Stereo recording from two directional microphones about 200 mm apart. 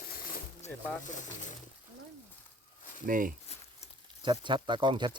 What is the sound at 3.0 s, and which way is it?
Speech, 45° right (ahead or behind).